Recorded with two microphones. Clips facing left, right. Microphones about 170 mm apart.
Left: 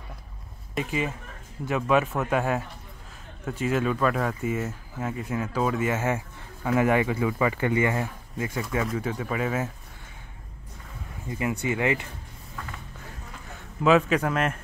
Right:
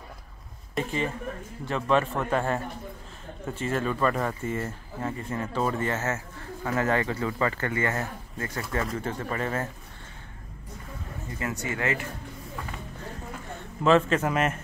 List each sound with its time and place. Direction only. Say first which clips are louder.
0.7 s speech: even; 5° left (ahead or behind)
11.6 s speech: left 3 dB; 15° left (ahead or behind)
13.8 s speech: left 1 dB; 5° left (ahead or behind)